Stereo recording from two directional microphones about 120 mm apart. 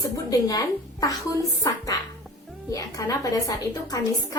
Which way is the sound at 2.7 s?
30° left (ahead or behind).